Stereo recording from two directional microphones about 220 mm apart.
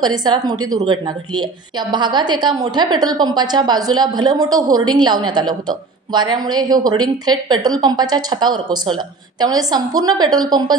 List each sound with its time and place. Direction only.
0.0 s a woman's voice: 20° right (ahead or behind)